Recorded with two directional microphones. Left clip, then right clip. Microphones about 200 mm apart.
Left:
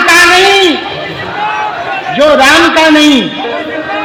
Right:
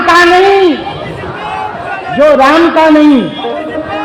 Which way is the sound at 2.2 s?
30° right (ahead or behind).